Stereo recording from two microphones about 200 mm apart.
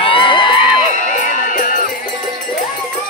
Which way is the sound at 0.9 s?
40° left (ahead or behind).